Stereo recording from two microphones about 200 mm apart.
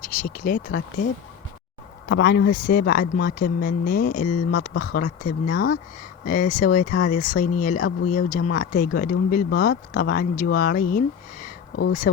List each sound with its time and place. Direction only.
0.0 s speech: 40° left (ahead or behind)
2.0 s a man's voice: 55° left (ahead or behind)